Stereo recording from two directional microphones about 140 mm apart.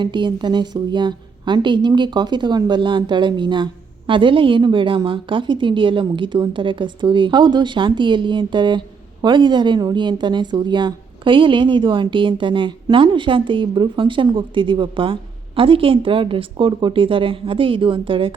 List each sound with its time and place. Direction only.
0.0 s a woman's voice: 35° right (ahead or behind)